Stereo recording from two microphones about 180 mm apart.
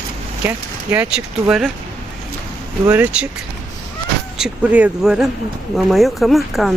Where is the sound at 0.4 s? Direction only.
10° right (ahead or behind).